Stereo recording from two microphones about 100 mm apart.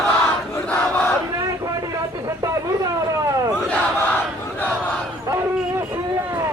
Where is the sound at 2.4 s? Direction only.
30° right (ahead or behind).